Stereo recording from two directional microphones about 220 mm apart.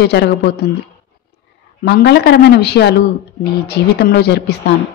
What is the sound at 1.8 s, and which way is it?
Speech, 50° left (ahead or behind).